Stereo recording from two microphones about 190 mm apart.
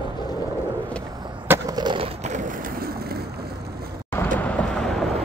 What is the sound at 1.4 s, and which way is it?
Skateboard, 15° right (ahead or behind).